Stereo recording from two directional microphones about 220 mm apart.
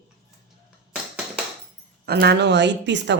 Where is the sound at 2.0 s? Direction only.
45° right (ahead or behind).